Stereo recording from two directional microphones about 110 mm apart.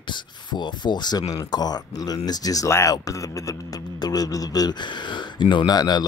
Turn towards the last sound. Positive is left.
turn(degrees=40)  # may be behind; listen again after turning